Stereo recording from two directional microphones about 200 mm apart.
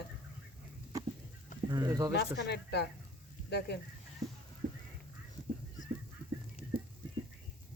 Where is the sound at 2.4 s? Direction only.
55° left (ahead or behind).